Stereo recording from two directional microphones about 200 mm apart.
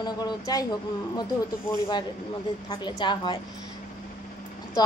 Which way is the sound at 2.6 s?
25° left (ahead or behind).